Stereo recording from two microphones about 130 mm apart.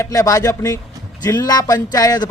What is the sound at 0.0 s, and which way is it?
Speech, 25° left (ahead or behind).